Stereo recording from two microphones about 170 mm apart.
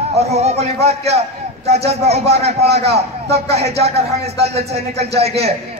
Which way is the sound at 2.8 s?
75° right (ahead or behind).